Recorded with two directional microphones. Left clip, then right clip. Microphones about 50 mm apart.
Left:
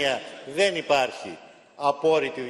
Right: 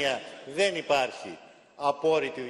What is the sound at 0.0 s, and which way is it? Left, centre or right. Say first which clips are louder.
A man's voice: left 3 dB; left.